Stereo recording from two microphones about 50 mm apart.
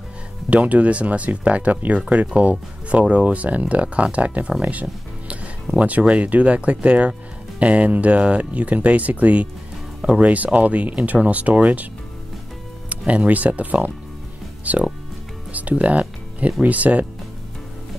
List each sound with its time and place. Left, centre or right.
0.5 s speech: right
12.9 s speech: right
14.6 s music: right
15.8 s speech: right